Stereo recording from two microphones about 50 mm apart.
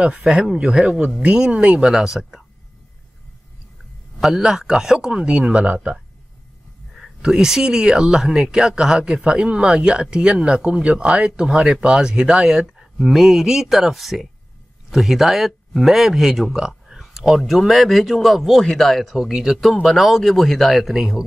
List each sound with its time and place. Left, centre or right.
0.0 s speech: right
1.9 s speech: centre
4.2 s speech: centre
7.2 s speech: centre
16.5 s a sound: centre
17.5 s speech: centre